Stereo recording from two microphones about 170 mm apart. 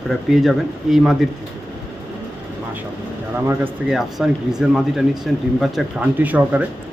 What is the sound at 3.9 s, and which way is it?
Speech, centre (ahead or behind).